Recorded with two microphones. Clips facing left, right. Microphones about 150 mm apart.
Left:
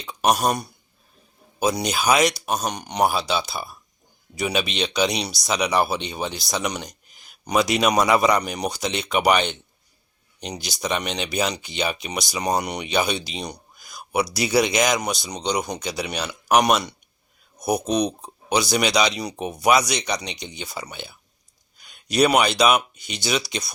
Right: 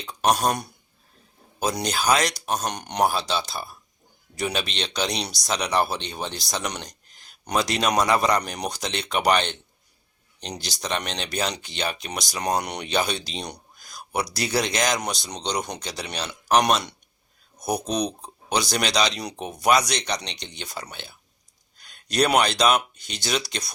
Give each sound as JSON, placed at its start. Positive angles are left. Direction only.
{"t": 0.0, "sound": "speech", "side_deg": 5}